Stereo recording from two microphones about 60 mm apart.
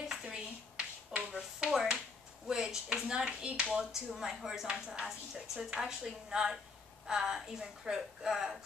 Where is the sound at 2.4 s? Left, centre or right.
Centre.